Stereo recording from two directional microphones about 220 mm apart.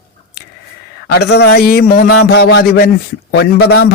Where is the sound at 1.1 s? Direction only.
50° left (ahead or behind).